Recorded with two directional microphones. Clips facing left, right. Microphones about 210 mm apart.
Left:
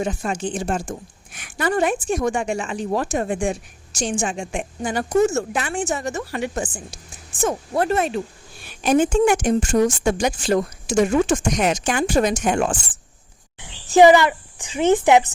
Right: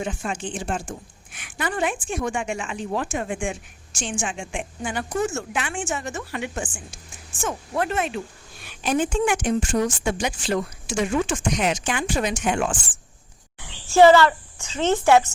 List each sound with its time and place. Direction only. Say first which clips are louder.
0.0 s a woman's voice: left 4 dB; 40° left (ahead or behind)
13.6 s speech: left 2 dB; 20° left (ahead or behind)